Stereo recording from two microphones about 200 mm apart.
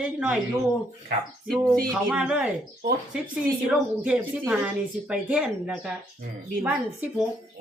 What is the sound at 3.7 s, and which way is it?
A woman's voice, 5° right (ahead or behind).